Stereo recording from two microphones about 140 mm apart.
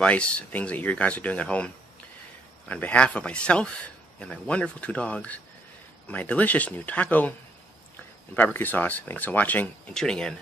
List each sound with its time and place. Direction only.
0.0 s speech: 10° left (ahead or behind)
2.7 s speech: 10° left (ahead or behind)
8.4 s speech: 15° left (ahead or behind)